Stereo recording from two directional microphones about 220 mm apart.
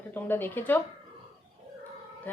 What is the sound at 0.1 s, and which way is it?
Speech, 10° left (ahead or behind).